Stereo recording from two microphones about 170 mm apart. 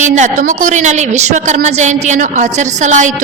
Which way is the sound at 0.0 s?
45° right (ahead or behind).